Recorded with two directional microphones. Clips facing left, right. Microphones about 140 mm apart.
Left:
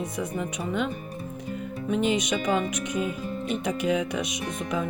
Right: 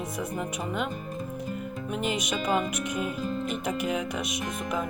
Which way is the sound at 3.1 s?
45° right (ahead or behind).